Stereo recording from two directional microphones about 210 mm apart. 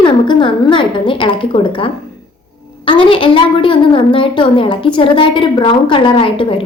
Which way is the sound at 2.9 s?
25° left (ahead or behind).